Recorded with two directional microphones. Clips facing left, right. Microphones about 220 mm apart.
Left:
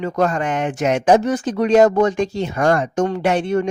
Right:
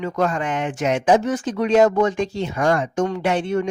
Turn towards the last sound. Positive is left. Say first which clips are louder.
# left 3 dB
turn(degrees=40)  # may be behind; listen again after turning